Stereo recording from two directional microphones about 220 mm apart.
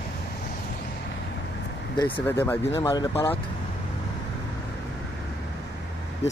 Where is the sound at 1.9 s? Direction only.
15° left (ahead or behind).